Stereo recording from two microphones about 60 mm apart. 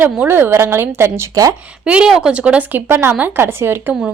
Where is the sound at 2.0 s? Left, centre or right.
Centre.